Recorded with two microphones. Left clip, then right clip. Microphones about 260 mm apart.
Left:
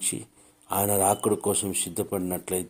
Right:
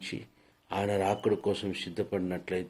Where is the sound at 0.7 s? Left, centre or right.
Left.